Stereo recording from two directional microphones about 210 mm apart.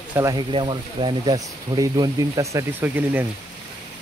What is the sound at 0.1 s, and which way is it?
Speech, 15° right (ahead or behind).